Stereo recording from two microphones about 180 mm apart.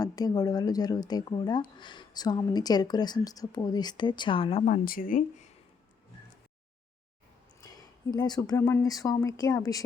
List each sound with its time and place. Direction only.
0.0 s speech: 20° left (ahead or behind); by 5.5 s 50° left (ahead or behind)
7.6 s speech: 20° left (ahead or behind)